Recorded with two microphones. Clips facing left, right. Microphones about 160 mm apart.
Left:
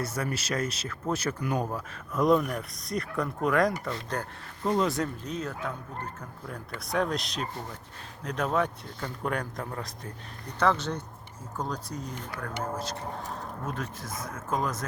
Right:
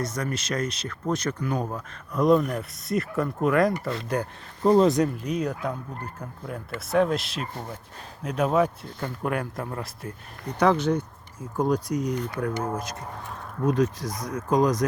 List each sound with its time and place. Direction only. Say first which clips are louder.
0.0 s speech: right 2 dB; 10° left (ahead or behind)
3.8 s speech: right 5 dB; 15° right (ahead or behind)
4.6 s speech: right 8 dB; 35° right (ahead or behind)
4.9 s speech: right 8 dB; 15° right (ahead or behind)
6.7 s speech: right 6 dB; centre (ahead or behind)
14.3 s speech: right 9 dB; 15° right (ahead or behind)